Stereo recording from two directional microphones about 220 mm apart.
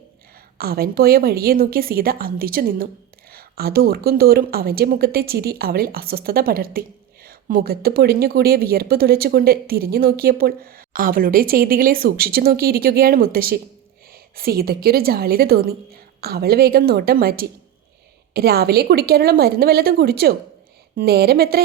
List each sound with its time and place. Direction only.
0.6 s a woman's voice: 45° right (ahead or behind)